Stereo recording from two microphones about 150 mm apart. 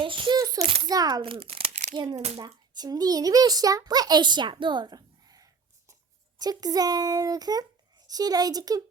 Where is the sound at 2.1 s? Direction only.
45° right (ahead or behind).